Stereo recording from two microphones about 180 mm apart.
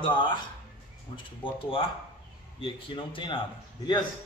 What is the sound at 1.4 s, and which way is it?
A man's voice, 30° left (ahead or behind).